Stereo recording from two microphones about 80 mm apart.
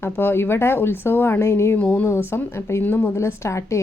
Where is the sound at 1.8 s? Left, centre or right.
Centre.